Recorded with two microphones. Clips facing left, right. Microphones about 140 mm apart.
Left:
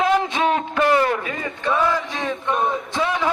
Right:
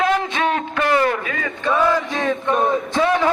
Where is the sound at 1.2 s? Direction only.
90° right.